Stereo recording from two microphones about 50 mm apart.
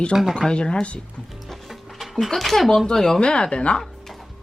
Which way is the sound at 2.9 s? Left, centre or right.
Centre.